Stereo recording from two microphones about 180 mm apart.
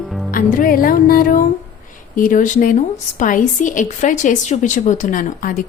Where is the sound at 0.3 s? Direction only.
50° left (ahead or behind).